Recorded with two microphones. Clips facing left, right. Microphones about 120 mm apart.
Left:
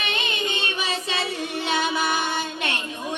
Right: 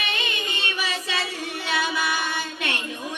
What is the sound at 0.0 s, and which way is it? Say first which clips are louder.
Music: left 2 dB; 25° left (ahead or behind).